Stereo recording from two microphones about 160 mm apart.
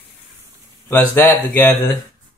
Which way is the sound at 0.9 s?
10° left (ahead or behind).